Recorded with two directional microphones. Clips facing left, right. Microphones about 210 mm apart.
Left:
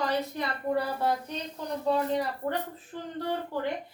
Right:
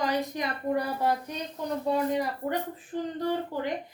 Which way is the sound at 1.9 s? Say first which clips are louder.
Even; 10° right (ahead or behind).